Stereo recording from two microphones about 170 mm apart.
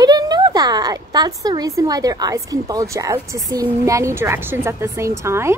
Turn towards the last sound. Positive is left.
turn(degrees=-15)  # may be behind; listen again after turning